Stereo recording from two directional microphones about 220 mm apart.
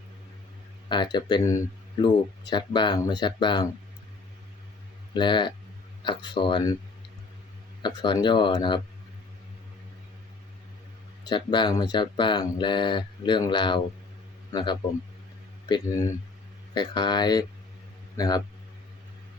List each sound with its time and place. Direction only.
0.9 s speech: 20° left (ahead or behind)
5.1 s speech: 20° left (ahead or behind)
7.8 s speech: 20° left (ahead or behind)
11.2 s speech: 20° left (ahead or behind)
16.7 s a man's voice: 20° left (ahead or behind)